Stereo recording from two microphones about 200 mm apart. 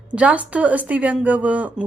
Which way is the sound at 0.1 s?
5° right (ahead or behind).